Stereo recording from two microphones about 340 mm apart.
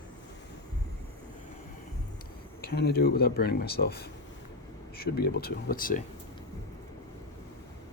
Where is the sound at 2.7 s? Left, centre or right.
Left.